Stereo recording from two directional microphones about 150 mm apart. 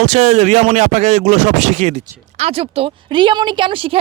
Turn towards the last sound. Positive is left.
turn(degrees=-35)  # may be behind; listen again after turning